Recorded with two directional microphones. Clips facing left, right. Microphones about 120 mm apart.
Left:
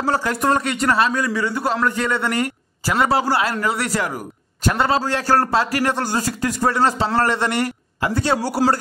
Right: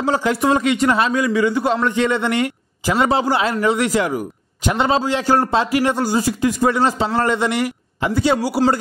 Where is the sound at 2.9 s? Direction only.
20° right (ahead or behind).